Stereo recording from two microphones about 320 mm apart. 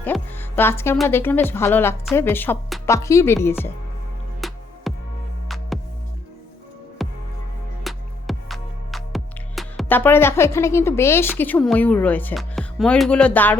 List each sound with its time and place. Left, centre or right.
0.0 s speech: centre
4.4 s music: centre
7.0 s music: centre